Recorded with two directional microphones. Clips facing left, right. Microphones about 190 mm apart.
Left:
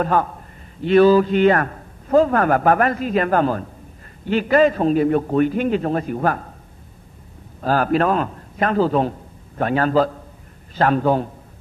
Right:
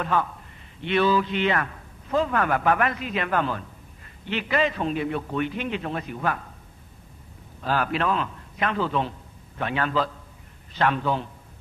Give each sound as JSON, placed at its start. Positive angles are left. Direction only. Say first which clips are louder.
{"t": 0.0, "sound": "a man's voice", "louder": "left 6 dB", "side_deg": 45}
{"t": 7.6, "sound": "a man's voice", "louder": "left 7 dB", "side_deg": 40}